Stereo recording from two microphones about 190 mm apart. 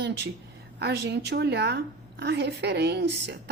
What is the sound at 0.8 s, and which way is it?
A woman's voice, 60° right (ahead or behind).